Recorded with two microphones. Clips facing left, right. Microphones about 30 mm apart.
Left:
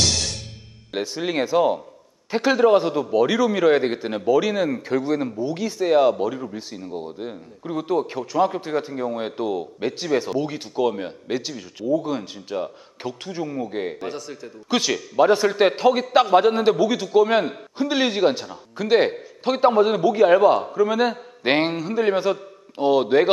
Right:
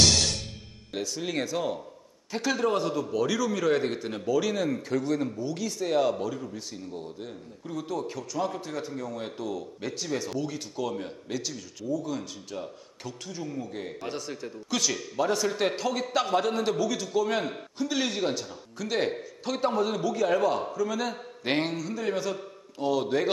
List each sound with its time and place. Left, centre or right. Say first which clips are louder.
0.9 s speech: left 7 dB; left
13.9 s a man's voice: left 4 dB; centre
14.7 s a man's voice: left 7 dB; left